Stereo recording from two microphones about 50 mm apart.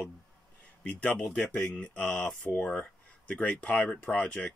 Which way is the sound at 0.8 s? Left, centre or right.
Left.